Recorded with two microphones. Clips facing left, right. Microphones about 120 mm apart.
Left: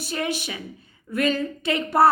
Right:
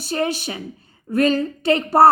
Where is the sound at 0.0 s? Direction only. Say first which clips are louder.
Right 5 dB; 30° right (ahead or behind).